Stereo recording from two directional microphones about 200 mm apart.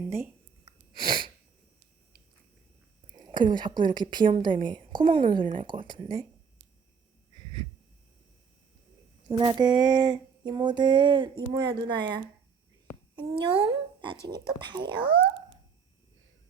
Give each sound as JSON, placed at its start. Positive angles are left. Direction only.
{"t": 0.0, "sound": "a sound", "side_deg": -10}
{"t": 1.0, "sound": "sneeze", "side_deg": -25}
{"t": 3.1, "sound": "a woman's voice", "side_deg": -20}
{"t": 9.3, "sound": "a woman's voice", "side_deg": -20}